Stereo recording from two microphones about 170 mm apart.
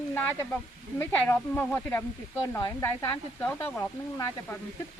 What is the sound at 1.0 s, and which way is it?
Speech, 10° left (ahead or behind).